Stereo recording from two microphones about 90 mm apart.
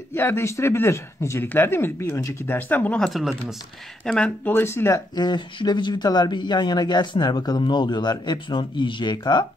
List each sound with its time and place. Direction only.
0.1 s speech: 25° left (ahead or behind)
3.1 s speech: centre (ahead or behind)
4.5 s speech: 25° left (ahead or behind)
5.1 s speech: 55° left (ahead or behind)